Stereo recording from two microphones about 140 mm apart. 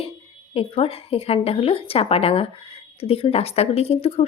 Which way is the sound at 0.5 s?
45° left (ahead or behind).